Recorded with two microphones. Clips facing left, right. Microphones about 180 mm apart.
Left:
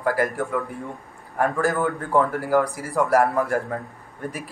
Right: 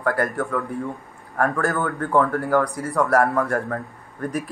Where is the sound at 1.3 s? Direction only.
20° left (ahead or behind).